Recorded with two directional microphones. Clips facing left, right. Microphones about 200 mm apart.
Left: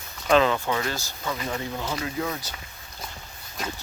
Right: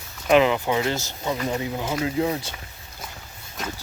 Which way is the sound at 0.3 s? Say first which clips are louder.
Right 3 dB; 15° right (ahead or behind).